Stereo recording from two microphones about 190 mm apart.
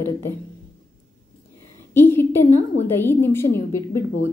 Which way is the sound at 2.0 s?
10° left (ahead or behind).